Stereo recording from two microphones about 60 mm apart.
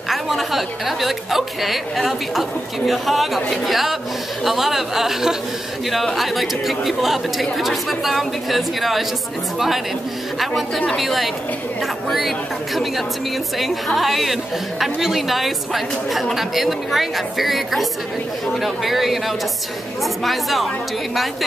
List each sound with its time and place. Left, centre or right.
0.1 s a woman's voice: centre
11.0 s a woman's voice: centre